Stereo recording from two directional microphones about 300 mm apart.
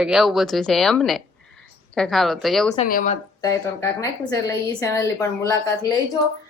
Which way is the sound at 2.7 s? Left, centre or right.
Left.